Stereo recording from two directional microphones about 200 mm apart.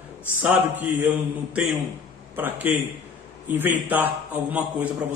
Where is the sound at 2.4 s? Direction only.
10° right (ahead or behind).